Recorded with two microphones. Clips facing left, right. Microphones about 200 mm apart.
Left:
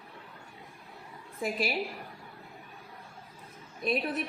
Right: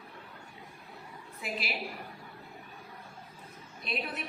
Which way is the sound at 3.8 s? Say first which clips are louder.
Left 7 dB; 45° left (ahead or behind).